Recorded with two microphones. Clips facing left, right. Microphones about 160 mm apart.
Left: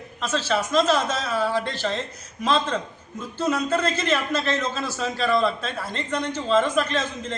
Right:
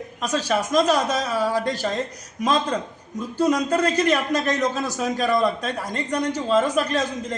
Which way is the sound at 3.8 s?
40° right (ahead or behind).